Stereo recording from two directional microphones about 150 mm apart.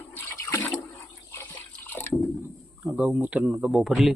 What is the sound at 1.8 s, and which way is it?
Water, 15° left (ahead or behind).